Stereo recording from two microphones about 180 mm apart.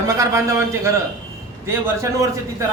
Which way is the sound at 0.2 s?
15° right (ahead or behind).